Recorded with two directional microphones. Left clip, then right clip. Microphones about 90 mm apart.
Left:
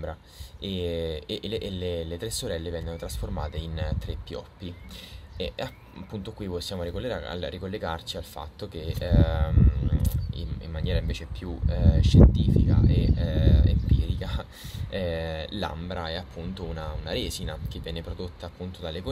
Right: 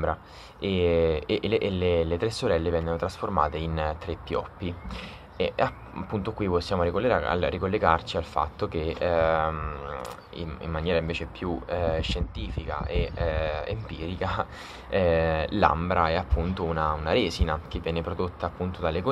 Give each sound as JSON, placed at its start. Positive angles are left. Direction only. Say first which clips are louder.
{"t": 0.0, "sound": "speech", "louder": "right 9 dB", "side_deg": 15}
{"t": 6.1, "sound": "speech", "louder": "right 8 dB", "side_deg": 15}
{"t": 9.6, "sound": "speech", "louder": "left 1 dB", "side_deg": 30}
{"t": 9.9, "sound": "speech", "louder": "right 3 dB", "side_deg": 15}